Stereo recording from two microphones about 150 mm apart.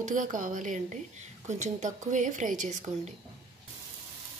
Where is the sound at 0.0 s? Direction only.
60° right (ahead or behind).